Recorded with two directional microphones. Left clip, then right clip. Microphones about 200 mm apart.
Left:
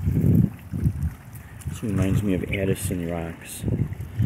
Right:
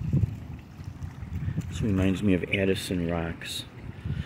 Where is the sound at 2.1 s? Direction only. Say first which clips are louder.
Right 1 dB; 10° right (ahead or behind).